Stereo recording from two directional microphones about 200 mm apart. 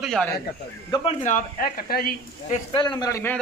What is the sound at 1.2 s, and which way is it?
Speech, 45° left (ahead or behind).